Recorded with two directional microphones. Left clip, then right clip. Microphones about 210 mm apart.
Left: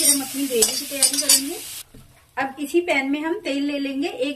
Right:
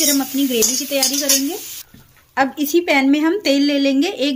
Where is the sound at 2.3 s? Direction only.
50° right (ahead or behind).